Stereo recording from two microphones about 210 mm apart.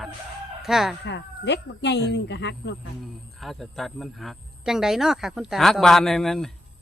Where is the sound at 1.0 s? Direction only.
55° left (ahead or behind).